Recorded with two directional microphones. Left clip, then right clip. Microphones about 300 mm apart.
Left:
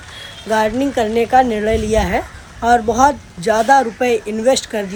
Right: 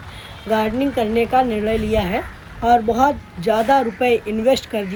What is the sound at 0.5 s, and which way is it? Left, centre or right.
A woman's voice, centre.